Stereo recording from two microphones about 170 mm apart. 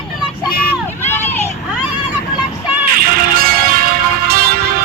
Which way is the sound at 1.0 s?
10° left (ahead or behind).